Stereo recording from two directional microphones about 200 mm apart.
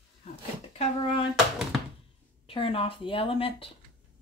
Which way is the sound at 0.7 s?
30° left (ahead or behind).